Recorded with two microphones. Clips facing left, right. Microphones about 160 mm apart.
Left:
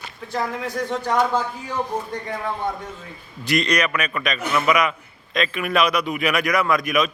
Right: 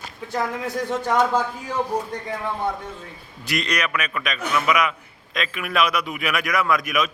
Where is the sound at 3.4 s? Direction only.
5° right (ahead or behind).